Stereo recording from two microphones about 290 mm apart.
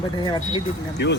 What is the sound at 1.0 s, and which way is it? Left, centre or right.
Speech, left.